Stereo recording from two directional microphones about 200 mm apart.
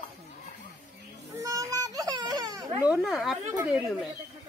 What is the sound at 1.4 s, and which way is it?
Speech, 15° right (ahead or behind).